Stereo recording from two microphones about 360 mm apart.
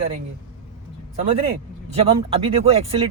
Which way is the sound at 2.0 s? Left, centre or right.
Centre.